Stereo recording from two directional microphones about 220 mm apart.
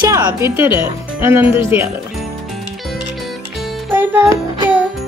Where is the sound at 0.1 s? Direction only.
15° right (ahead or behind).